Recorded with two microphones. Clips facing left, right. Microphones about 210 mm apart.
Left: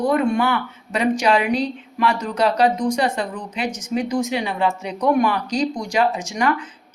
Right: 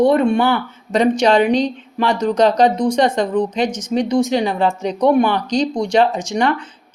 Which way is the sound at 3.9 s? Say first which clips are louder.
Right 5 dB; 30° right (ahead or behind).